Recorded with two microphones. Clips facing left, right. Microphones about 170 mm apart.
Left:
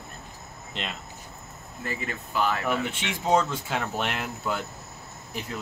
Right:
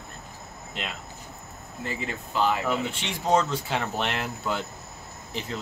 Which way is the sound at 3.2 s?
5° left (ahead or behind).